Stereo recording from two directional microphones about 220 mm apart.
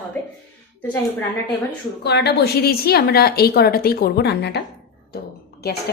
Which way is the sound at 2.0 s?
50° left (ahead or behind).